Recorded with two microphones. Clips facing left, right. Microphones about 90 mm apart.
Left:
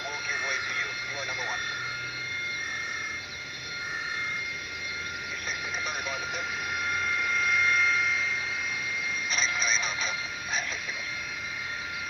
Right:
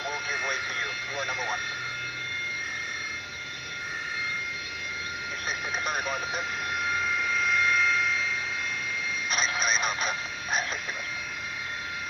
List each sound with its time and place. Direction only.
5.5 s vehicle: 45° right (ahead or behind)
6.7 s vehicle: centre (ahead or behind)
9.3 s a sound: 50° right (ahead or behind)